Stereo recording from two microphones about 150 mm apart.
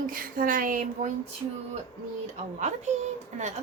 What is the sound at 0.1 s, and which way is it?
A woman's voice, 70° right (ahead or behind).